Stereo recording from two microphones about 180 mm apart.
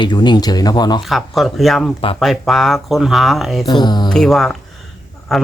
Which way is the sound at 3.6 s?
25° left (ahead or behind).